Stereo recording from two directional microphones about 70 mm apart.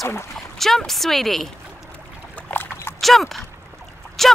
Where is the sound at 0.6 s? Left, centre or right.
Centre.